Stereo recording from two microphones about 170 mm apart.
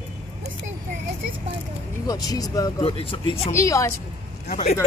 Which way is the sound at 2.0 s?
20° left (ahead or behind).